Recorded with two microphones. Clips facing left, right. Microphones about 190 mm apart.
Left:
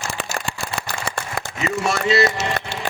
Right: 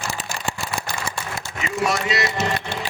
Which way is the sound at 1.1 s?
55° left (ahead or behind).